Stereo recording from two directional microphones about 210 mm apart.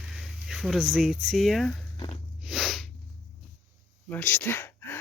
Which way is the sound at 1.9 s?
25° left (ahead or behind).